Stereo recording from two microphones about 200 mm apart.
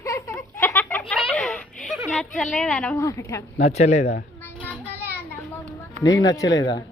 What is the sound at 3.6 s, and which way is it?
Speech, 35° left (ahead or behind).